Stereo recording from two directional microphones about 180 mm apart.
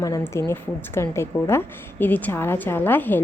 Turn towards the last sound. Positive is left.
turn(degrees=10)  # may be behind; listen again after turning